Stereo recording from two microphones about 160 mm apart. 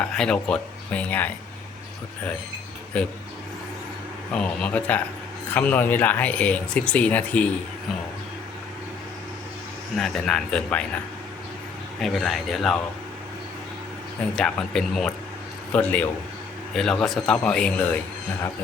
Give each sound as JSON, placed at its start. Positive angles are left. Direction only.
{"t": 0.0, "sound": "speech", "side_deg": 5}
{"t": 2.9, "sound": "speech", "side_deg": 10}
{"t": 4.4, "sound": "speech", "side_deg": 5}
{"t": 10.0, "sound": "speech", "side_deg": 5}
{"t": 11.9, "sound": "speech", "side_deg": 0}
{"t": 14.3, "sound": "speech", "side_deg": 5}